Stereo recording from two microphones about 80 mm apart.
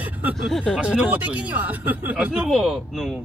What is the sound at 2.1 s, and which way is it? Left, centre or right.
Speech, centre.